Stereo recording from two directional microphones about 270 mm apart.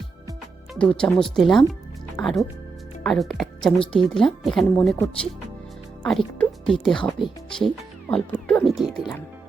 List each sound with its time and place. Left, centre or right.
0.8 s a woman's voice: centre
6.1 s music: centre
7.0 s speech: centre